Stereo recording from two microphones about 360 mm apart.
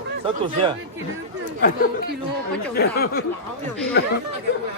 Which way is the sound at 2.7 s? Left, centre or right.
Left.